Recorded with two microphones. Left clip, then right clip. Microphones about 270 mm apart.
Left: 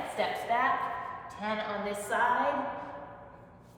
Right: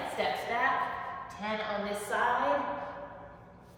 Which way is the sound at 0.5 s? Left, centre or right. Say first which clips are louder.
Left 4 dB; centre.